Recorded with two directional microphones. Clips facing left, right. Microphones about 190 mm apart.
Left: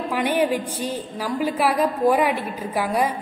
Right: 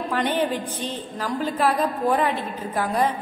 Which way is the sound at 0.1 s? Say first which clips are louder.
Left 3 dB; 10° left (ahead or behind).